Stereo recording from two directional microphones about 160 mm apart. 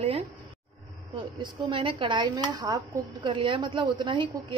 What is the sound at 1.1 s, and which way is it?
Speech, 30° right (ahead or behind).